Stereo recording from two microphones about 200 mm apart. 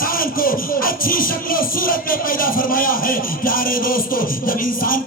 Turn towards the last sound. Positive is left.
turn(degrees=45)  # may be behind; listen again after turning